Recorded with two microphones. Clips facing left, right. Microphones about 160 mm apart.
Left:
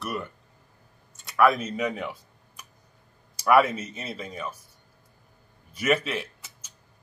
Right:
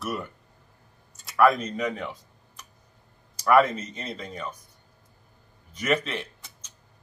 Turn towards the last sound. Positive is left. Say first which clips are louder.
# left 3 dB
turn(degrees=5)  # may be behind; listen again after turning